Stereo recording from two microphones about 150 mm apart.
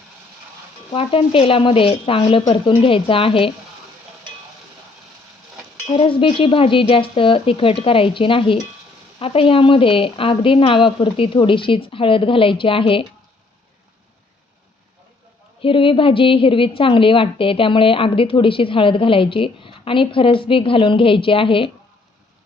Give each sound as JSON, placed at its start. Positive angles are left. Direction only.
{"t": 0.9, "sound": "a woman's voice", "side_deg": 40}
{"t": 5.9, "sound": "a woman's voice", "side_deg": 35}
{"t": 15.6, "sound": "a woman's voice", "side_deg": 35}